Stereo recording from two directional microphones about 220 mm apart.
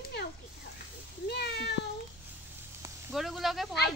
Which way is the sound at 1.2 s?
50° left (ahead or behind).